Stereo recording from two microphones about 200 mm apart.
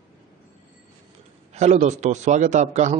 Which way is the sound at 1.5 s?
35° right (ahead or behind).